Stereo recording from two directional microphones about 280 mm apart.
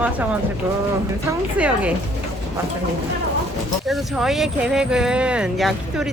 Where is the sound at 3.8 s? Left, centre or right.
Centre.